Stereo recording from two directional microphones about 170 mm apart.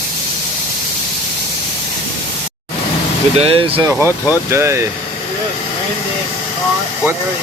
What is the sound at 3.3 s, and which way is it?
Speech, 35° right (ahead or behind).